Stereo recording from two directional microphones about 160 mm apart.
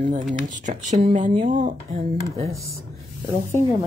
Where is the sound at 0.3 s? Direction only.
50° right (ahead or behind).